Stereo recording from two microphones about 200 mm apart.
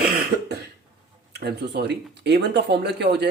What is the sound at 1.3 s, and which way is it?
Speech, 55° right (ahead or behind).